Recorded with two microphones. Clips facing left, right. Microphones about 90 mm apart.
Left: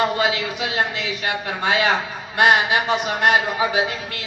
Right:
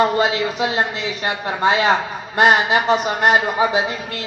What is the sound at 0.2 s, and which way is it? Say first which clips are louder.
A man's voice: right 3 dB; 35° right (ahead or behind).